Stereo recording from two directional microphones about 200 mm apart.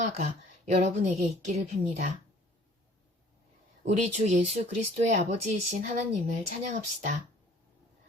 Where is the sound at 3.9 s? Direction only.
35° right (ahead or behind).